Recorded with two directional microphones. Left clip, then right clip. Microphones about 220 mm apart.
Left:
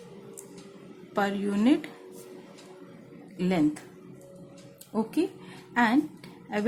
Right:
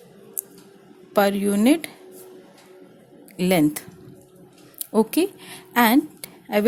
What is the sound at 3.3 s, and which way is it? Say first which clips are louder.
Speech: right 7 dB; 45° right (ahead or behind).